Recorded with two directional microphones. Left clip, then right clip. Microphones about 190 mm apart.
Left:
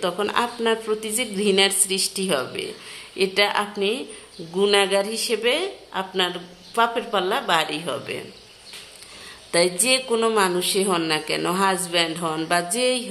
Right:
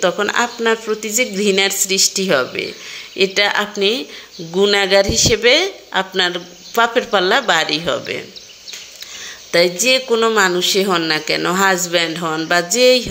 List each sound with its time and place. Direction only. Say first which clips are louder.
0.0 s a woman's voice: right 7 dB; 15° right (ahead or behind)
9.5 s a woman's voice: right 6 dB; 10° right (ahead or behind)